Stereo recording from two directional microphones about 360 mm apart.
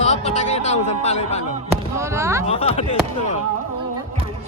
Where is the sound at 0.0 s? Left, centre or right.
Centre.